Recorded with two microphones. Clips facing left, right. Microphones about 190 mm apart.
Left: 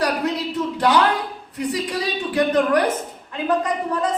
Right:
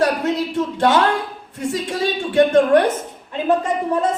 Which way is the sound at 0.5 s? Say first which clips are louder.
Right 1 dB; 25° right (ahead or behind).